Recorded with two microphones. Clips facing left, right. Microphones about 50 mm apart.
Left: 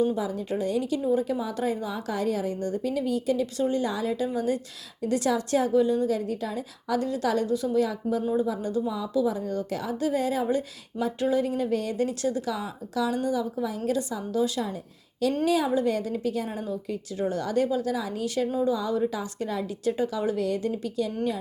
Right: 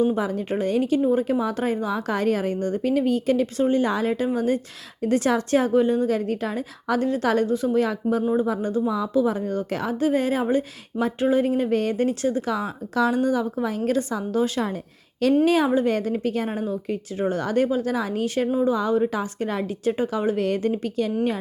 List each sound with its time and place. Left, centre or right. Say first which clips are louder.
0.2 s a woman's voice: right 4 dB; right
3.4 s a woman's voice: right 5 dB; right
8.2 s a woman's voice: right 4 dB; right
8.9 s a woman's voice: right 5 dB; right
12.5 s a woman's voice: right 6 dB; right